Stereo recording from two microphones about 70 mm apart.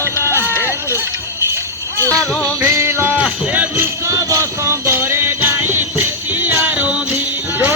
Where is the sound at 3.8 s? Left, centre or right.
Right.